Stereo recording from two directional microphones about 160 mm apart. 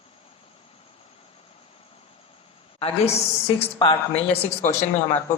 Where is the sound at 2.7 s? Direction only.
40° left (ahead or behind).